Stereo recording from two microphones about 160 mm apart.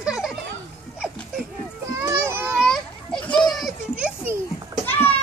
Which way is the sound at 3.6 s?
5° right (ahead or behind).